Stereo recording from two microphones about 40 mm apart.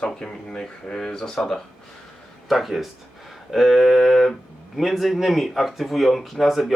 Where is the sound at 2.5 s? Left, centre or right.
Centre.